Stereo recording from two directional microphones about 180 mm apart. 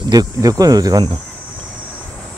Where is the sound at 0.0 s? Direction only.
20° right (ahead or behind).